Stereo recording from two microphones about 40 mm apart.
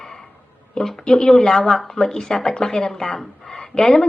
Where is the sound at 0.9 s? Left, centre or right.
Centre.